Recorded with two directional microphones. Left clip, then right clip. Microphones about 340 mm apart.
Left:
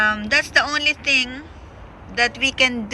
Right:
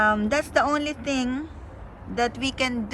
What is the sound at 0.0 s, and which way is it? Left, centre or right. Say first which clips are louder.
A woman's voice: left 4 dB; centre.